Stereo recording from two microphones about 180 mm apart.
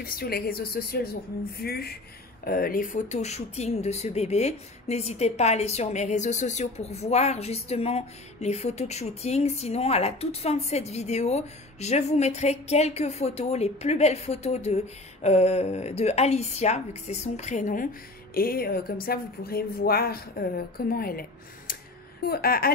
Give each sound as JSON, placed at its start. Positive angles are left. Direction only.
{"t": 0.0, "sound": "speech", "side_deg": 55}
{"t": 18.3, "sound": "speech", "side_deg": 55}